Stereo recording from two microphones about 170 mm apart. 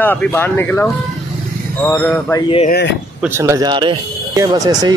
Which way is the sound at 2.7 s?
90° left.